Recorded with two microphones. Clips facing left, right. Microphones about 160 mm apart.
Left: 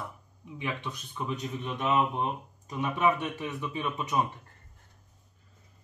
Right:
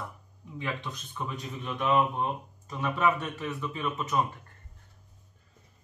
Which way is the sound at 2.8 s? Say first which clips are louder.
Even; 15° left (ahead or behind).